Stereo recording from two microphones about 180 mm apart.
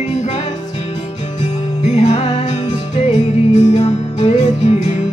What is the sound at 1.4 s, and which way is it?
Music, 40° left (ahead or behind).